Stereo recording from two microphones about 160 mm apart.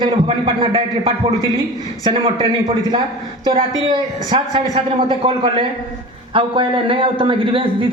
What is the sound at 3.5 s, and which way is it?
A woman's voice, 30° right (ahead or behind).